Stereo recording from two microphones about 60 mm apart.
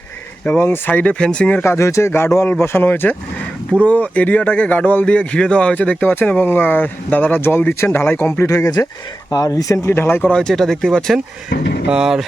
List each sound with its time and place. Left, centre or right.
0.6 s speech: left
1.2 s speech: centre
1.6 s speech: left
7.8 s speech: left
8.4 s speech: left
9.3 s speech: left
9.8 s speech: left
10.3 s speech: centre
11.9 s speech: centre